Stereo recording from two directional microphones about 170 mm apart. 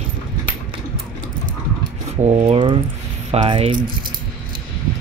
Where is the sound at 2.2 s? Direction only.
35° right (ahead or behind).